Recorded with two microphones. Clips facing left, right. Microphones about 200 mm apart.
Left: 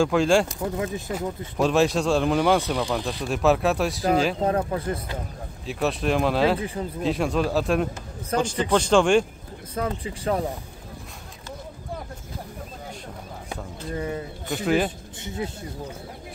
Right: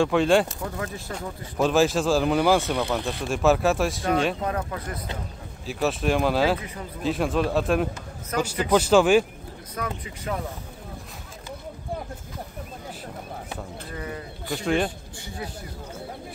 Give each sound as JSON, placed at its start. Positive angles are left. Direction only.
{"t": 0.0, "sound": "speech", "side_deg": 0}
{"t": 0.7, "sound": "speech", "side_deg": 20}
{"t": 1.1, "sound": "speech", "side_deg": 0}
{"t": 4.4, "sound": "speech", "side_deg": 30}
{"t": 5.7, "sound": "a man's voice", "side_deg": 0}
{"t": 9.8, "sound": "speech", "side_deg": 30}
{"t": 13.8, "sound": "speech", "side_deg": 30}
{"t": 14.5, "sound": "speech", "side_deg": 0}
{"t": 15.2, "sound": "speech", "side_deg": 25}